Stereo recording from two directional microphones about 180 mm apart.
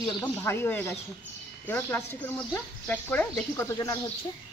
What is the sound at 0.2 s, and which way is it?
A woman's voice, 10° left (ahead or behind).